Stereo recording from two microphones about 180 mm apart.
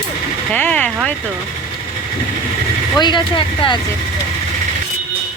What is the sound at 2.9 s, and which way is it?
Speech, 25° left (ahead or behind).